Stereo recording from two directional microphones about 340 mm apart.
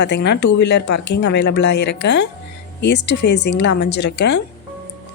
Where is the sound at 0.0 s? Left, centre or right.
Left.